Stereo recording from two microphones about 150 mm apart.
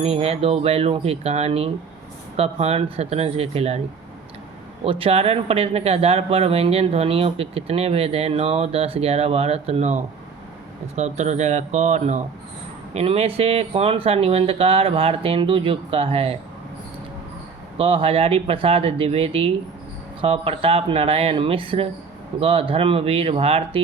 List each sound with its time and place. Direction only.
0.0 s speech: 40° right (ahead or behind)
4.8 s speech: 40° right (ahead or behind)
17.7 s speech: 35° right (ahead or behind)